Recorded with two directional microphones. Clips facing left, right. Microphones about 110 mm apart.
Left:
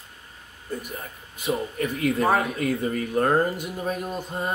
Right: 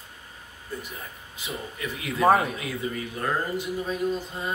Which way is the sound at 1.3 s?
50° left (ahead or behind).